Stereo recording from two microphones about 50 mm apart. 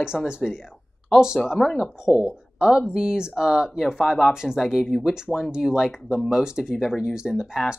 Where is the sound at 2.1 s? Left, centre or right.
Centre.